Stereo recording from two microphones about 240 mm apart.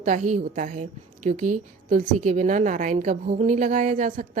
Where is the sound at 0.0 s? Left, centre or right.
Right.